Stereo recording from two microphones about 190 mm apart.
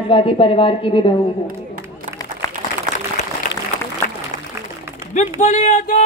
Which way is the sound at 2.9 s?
15° left (ahead or behind).